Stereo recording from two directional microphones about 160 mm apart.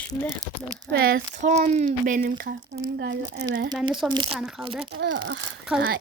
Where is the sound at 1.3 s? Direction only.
50° right (ahead or behind); by 2.8 s 65° right (ahead or behind).